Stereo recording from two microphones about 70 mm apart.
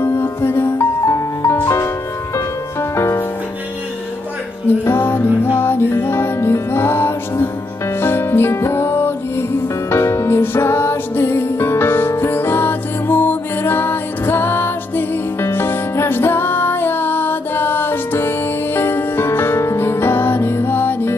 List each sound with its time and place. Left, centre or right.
0.0 s music: left
4.8 s music: left